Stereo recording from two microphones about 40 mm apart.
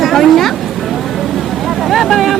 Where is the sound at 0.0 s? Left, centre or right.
Centre.